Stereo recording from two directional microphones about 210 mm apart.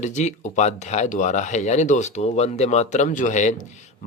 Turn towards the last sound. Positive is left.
turn(degrees=35)  # may be behind; listen again after turning